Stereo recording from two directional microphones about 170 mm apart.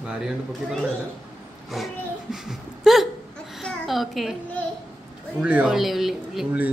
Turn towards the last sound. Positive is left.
turn(degrees=0)  # may be behind; listen again after turning